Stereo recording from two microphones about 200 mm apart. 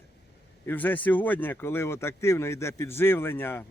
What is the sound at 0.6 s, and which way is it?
Speech, 10° left (ahead or behind).